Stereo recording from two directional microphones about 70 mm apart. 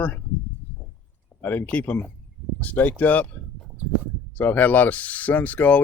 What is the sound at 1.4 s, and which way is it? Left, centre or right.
Speech, left.